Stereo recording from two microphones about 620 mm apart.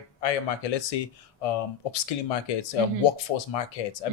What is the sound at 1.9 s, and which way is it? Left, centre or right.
Speech, left.